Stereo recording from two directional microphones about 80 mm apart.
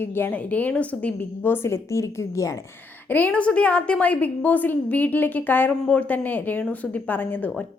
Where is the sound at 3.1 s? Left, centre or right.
Centre.